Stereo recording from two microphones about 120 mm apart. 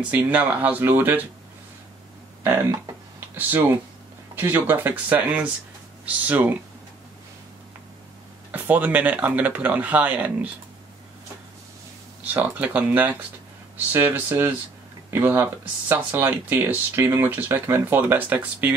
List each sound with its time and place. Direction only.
0.1 s speech: 15° right (ahead or behind)
3.3 s speech: 15° right (ahead or behind)
8.5 s speech: 15° right (ahead or behind)
12.4 s speech: 15° right (ahead or behind)